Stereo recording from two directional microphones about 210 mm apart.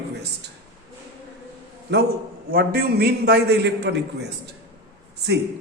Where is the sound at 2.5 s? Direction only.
45° right (ahead or behind).